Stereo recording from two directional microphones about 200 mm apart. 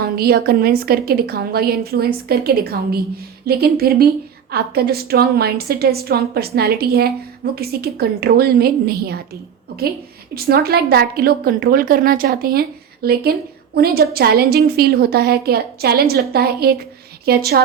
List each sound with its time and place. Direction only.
0.0 s a woman's voice: 50° right (ahead or behind)
10.3 s a woman's voice: 50° right (ahead or behind)